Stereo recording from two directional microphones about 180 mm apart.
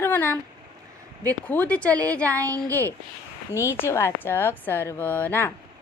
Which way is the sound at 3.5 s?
15° left (ahead or behind).